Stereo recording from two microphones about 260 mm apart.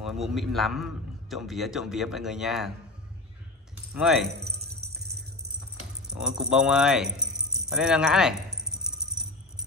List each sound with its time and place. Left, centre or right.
0.0 s a man's voice: centre
3.9 s a man's voice: centre
4.6 s music: right
6.1 s a man's voice: centre
7.7 s rattle: centre